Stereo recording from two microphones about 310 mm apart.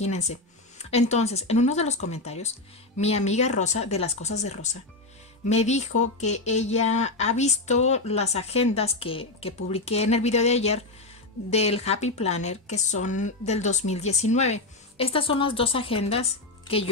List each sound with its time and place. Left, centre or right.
0.0 s speech: left